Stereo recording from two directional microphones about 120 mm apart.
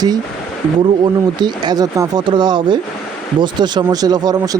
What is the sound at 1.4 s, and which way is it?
Speech, 40° right (ahead or behind).